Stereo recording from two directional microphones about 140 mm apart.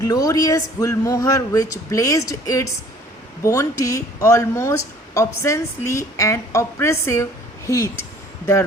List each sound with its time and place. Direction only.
0.0 s speech: 25° left (ahead or behind)